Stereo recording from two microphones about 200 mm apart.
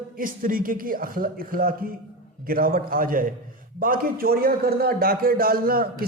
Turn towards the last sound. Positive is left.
turn(degrees=-45)  # may be behind; listen again after turning